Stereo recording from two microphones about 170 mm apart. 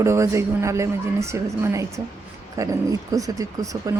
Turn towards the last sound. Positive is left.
turn(degrees=-20)  # may be behind; listen again after turning